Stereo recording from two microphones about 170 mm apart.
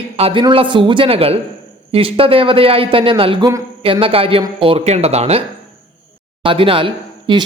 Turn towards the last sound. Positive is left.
turn(degrees=-30)  # may be behind; listen again after turning